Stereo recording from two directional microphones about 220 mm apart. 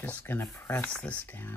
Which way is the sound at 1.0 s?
5° left (ahead or behind).